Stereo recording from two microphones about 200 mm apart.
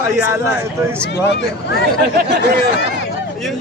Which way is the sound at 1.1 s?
60° left (ahead or behind).